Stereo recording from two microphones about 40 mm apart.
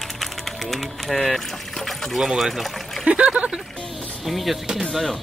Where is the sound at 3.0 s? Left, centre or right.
Right.